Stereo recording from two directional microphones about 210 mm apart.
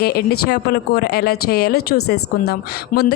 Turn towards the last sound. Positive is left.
turn(degrees=40)  # may be behind; listen again after turning